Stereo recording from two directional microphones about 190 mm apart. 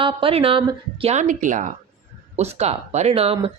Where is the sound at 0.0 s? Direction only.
25° right (ahead or behind).